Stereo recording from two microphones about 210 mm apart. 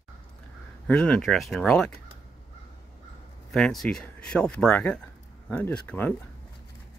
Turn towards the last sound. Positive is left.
turn(degrees=5)  # may be behind; listen again after turning